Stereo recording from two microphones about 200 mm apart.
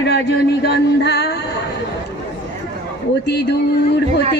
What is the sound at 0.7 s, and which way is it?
Music, 55° left (ahead or behind).